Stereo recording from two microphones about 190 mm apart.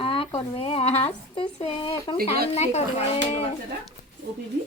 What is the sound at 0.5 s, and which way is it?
A woman's voice, 30° left (ahead or behind).